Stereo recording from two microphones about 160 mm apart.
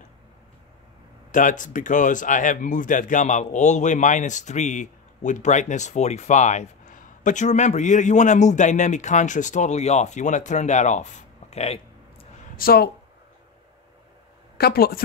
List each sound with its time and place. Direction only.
1.3 s speech: 55° left (ahead or behind)
12.5 s a woman's voice: 70° left (ahead or behind)
14.6 s a woman's voice: 70° left (ahead or behind)